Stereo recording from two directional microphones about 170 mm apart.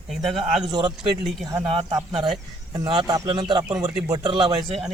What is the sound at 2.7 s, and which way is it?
Speech, 20° right (ahead or behind).